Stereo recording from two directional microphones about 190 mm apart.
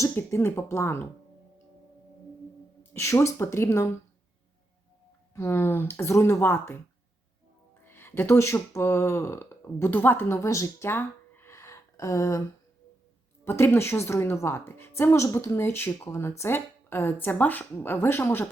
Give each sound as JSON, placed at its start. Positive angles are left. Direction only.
{"t": 0.0, "sound": "a woman's voice", "side_deg": 15}
{"t": 2.9, "sound": "a woman's voice", "side_deg": 15}
{"t": 5.3, "sound": "a woman's voice", "side_deg": 15}
{"t": 7.9, "sound": "speech", "side_deg": 10}
{"t": 13.4, "sound": "a woman's voice", "side_deg": 15}